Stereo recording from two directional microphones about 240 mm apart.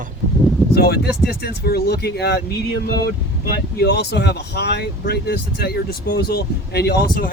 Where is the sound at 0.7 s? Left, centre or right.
Left.